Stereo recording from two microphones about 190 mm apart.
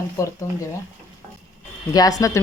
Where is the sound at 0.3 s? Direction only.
15° left (ahead or behind).